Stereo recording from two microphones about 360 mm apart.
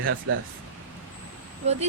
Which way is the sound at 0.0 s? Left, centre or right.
Right.